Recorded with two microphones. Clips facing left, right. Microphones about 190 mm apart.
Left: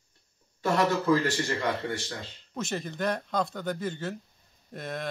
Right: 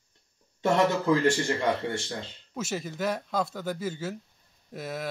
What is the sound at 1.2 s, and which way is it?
Speech, 25° right (ahead or behind).